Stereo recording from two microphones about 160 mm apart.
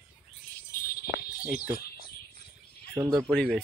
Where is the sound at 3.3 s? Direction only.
5° left (ahead or behind).